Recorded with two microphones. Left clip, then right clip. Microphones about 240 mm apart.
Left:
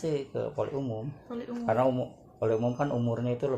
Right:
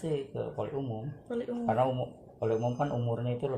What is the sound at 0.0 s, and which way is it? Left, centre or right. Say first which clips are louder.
Speech: left 3 dB; left.